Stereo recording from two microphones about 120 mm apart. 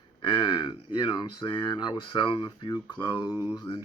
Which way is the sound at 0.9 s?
35° left (ahead or behind).